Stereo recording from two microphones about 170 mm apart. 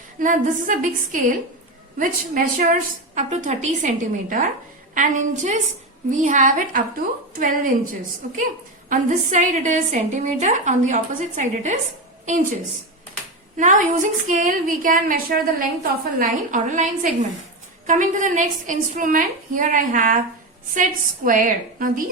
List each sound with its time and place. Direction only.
0.2 s a woman's voice: 50° right (ahead or behind)
8.9 s a woman's voice: 45° right (ahead or behind)
13.6 s a woman's voice: 50° right (ahead or behind)
21.2 s a woman's voice: 50° right (ahead or behind)